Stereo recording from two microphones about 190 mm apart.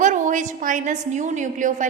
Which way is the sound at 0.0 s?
40° right (ahead or behind).